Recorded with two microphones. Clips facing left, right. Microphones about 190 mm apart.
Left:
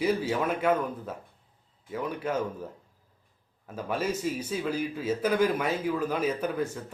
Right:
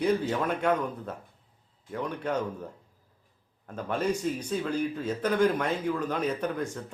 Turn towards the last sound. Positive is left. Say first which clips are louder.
# left 1 dB
turn(degrees=5)  # may be behind; listen again after turning